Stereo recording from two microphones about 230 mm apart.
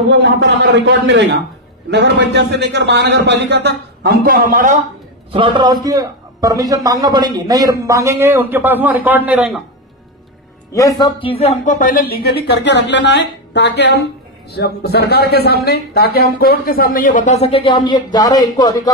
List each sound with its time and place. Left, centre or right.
0.1 s a man's voice: right
5.3 s a man's voice: right; by 9.6 s centre
10.7 s speech: centre